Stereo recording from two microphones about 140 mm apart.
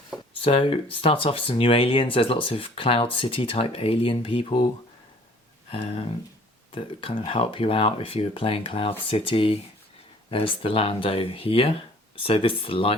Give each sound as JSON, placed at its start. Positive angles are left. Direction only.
{"t": 0.3, "sound": "speech", "side_deg": 40}
{"t": 5.7, "sound": "speech", "side_deg": 40}